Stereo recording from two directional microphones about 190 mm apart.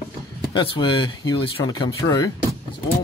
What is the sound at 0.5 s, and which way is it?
Speech, 25° left (ahead or behind).